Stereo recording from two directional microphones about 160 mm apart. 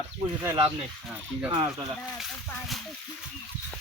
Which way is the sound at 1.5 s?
25° right (ahead or behind).